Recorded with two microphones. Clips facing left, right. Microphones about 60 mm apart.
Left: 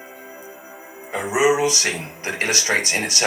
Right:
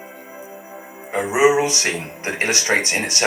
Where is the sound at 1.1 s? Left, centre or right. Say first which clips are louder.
Right 3 dB; right.